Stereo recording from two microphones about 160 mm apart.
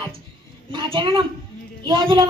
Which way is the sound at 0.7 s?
30° right (ahead or behind).